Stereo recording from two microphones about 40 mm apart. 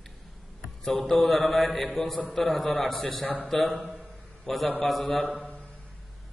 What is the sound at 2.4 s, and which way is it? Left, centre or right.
A man's voice, centre.